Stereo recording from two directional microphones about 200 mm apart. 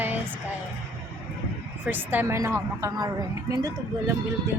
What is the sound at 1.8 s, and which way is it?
A woman's voice, 10° right (ahead or behind).